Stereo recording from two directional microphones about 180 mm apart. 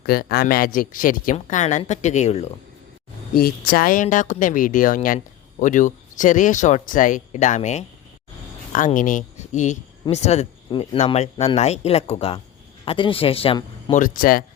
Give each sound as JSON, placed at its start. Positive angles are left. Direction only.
{"t": 0.0, "sound": "speech", "side_deg": 60}
{"t": 3.3, "sound": "speech", "side_deg": 55}
{"t": 13.9, "sound": "speech", "side_deg": 50}